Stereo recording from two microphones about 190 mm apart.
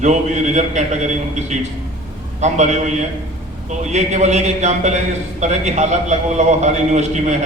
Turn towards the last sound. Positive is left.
turn(degrees=-40)  # may be behind; listen again after turning